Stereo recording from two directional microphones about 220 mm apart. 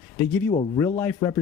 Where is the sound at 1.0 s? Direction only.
10° left (ahead or behind).